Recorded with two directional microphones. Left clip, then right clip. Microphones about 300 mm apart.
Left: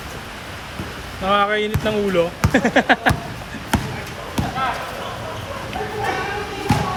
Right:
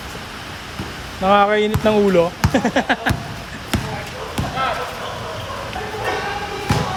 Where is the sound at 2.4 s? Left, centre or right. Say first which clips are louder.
Left 1 dB; centre.